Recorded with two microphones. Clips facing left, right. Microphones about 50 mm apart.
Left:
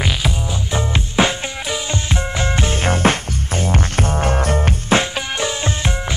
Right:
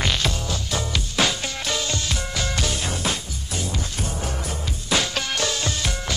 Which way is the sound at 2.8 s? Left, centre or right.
Left.